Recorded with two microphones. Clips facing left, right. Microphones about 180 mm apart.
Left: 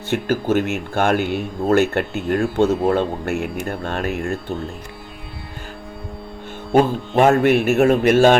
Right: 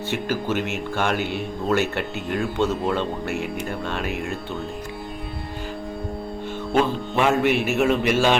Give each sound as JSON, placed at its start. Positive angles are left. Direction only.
{"t": 0.1, "sound": "speech", "side_deg": 50}
{"t": 6.7, "sound": "speech", "side_deg": 45}